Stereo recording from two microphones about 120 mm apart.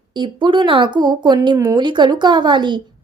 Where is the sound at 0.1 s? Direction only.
40° right (ahead or behind).